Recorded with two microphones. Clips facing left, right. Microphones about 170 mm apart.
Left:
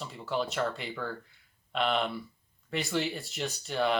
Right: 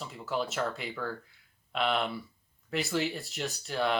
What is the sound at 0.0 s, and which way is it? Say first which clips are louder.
Speech: left 1 dB; centre (ahead or behind).